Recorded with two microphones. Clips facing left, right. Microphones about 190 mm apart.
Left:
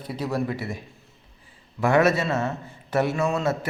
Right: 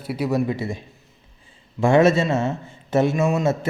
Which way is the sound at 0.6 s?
25° right (ahead or behind).